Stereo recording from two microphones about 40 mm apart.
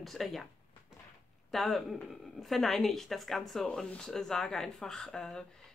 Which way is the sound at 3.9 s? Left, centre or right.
Left.